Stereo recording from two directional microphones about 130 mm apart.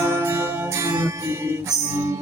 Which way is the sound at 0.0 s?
20° right (ahead or behind).